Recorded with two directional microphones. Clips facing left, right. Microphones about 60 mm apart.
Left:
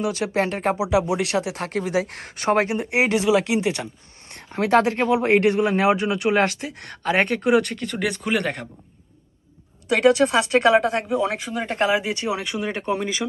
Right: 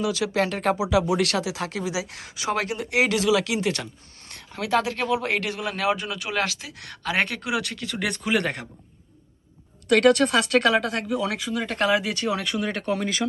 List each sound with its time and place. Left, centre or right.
0.0 s speech: left
1.4 s speech: left
2.6 s speech: left
4.4 s a man's voice: left
6.6 s speech: centre
8.0 s speech: centre
9.8 s speech: centre